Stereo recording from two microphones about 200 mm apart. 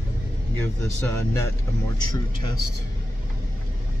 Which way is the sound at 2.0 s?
20° left (ahead or behind).